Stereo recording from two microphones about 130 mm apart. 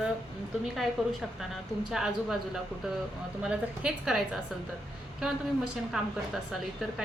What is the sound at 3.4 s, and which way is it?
Speech, 5° right (ahead or behind).